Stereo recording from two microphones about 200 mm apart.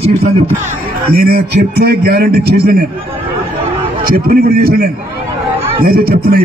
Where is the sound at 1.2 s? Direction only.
50° right (ahead or behind).